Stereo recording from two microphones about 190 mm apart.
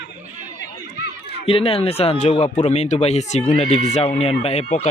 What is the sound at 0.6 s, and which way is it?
Run, 60° left (ahead or behind).